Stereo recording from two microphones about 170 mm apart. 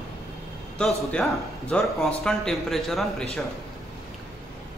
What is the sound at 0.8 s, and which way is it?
Speech, 5° left (ahead or behind).